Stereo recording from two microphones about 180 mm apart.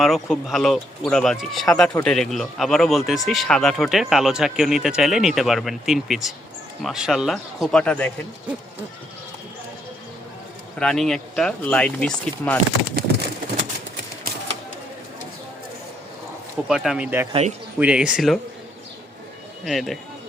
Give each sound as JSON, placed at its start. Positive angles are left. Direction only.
{"t": 0.0, "sound": "speech", "side_deg": 0}
{"t": 10.8, "sound": "speech", "side_deg": 5}
{"t": 12.8, "sound": "speech", "side_deg": -60}
{"t": 14.3, "sound": "typewriter", "side_deg": -55}
{"t": 16.6, "sound": "speech", "side_deg": 0}
{"t": 19.6, "sound": "speech", "side_deg": 0}